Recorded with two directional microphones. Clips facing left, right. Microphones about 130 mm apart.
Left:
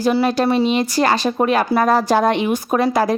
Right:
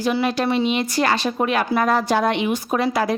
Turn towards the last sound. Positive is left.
turn(degrees=40)  # may be behind; listen again after turning